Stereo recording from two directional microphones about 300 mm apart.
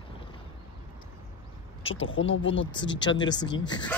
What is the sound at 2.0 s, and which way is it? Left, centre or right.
Speech, left.